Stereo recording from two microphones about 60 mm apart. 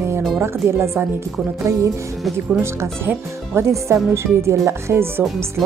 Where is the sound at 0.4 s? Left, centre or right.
Right.